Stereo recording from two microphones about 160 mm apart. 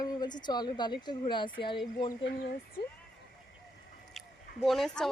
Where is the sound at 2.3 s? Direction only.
70° left (ahead or behind).